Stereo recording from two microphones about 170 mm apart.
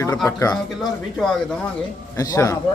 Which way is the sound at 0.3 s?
20° left (ahead or behind).